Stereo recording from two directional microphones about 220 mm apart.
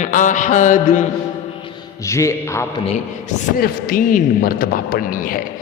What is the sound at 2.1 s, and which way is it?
Speech, 15° left (ahead or behind).